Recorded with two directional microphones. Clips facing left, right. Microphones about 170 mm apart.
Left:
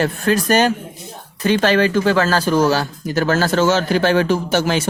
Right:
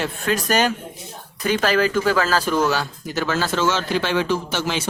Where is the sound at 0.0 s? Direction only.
35° left (ahead or behind).